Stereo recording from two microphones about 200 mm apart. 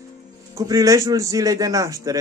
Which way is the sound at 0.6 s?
15° right (ahead or behind).